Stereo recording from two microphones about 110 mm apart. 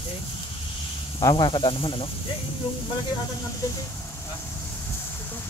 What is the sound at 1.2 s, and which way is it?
Speech, 45° left (ahead or behind).